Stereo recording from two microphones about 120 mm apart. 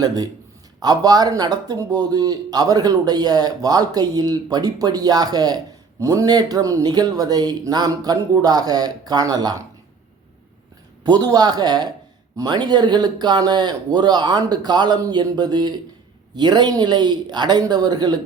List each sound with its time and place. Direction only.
0.8 s speech: 35° right (ahead or behind)
11.0 s speech: 35° right (ahead or behind)